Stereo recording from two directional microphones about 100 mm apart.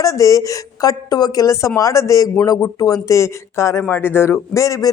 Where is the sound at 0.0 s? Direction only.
35° left (ahead or behind).